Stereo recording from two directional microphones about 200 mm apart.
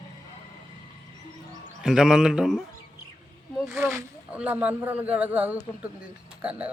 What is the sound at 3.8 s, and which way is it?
Speech, 10° right (ahead or behind).